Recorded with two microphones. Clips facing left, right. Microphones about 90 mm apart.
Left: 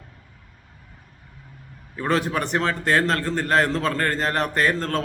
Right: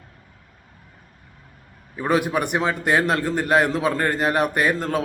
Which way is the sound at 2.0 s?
15° right (ahead or behind).